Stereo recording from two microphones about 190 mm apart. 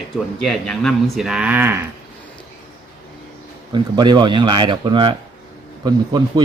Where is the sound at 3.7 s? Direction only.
20° right (ahead or behind).